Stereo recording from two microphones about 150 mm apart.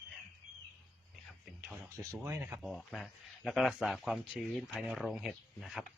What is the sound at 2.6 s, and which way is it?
Speech, centre (ahead or behind).